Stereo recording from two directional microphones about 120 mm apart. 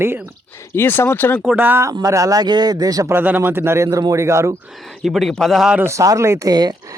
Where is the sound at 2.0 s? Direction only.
30° right (ahead or behind).